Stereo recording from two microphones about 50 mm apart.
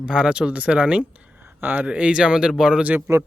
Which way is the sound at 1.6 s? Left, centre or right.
Right.